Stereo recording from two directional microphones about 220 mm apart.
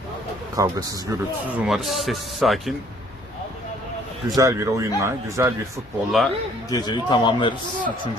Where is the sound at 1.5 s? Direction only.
Centre (ahead or behind).